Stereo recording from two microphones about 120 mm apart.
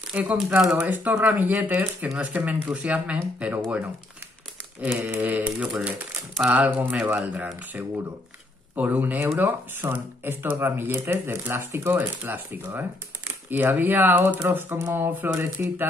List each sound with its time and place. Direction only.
0.1 s speech: 10° right (ahead or behind)